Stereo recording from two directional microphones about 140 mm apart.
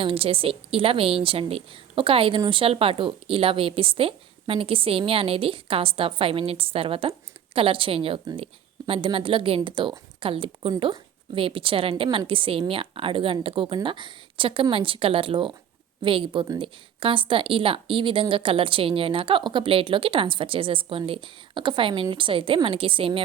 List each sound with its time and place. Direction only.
0.0 s a woman's voice: 40° right (ahead or behind)